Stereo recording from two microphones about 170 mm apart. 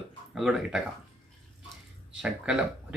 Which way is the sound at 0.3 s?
5° right (ahead or behind).